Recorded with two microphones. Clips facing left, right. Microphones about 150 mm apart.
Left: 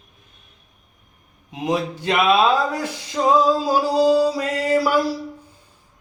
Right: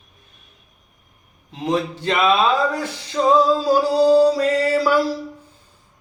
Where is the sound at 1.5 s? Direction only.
10° left (ahead or behind).